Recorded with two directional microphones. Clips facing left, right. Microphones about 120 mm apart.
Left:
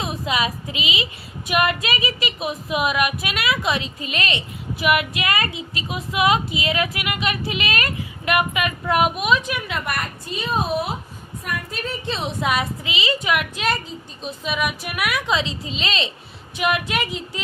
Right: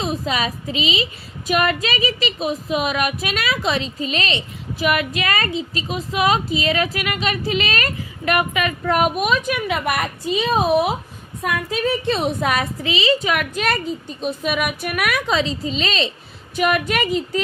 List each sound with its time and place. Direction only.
0.0 s speech: 35° right (ahead or behind)
9.8 s a woman's voice: 80° right
12.1 s speech: 50° right (ahead or behind); by 13.4 s 35° right (ahead or behind)
14.3 s a woman's voice: 55° right (ahead or behind)